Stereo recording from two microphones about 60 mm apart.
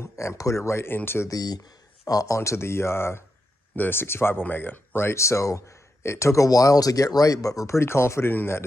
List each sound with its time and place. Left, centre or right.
0.0 s speech: left
1.3 s speech: left
2.3 s speech: left
3.7 s speech: left